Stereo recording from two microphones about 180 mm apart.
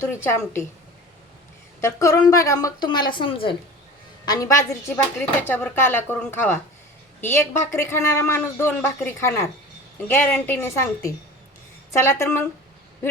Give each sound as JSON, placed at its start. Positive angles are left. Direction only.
{"t": 0.0, "sound": "a man's voice", "side_deg": 15}
{"t": 1.8, "sound": "a woman's voice", "side_deg": 15}
{"t": 4.3, "sound": "a woman's voice", "side_deg": 20}